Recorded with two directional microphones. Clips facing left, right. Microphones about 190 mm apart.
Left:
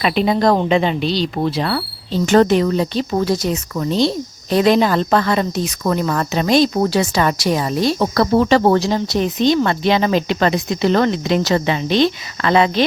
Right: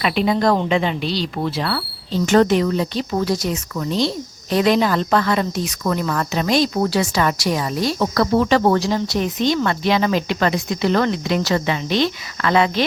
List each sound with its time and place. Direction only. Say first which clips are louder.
0.0 s speech: left 2 dB; 25° left (ahead or behind)
2.2 s speech: left 2 dB; 35° left (ahead or behind)